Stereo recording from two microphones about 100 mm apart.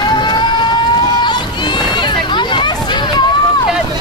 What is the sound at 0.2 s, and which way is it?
Vehicle, 50° left (ahead or behind).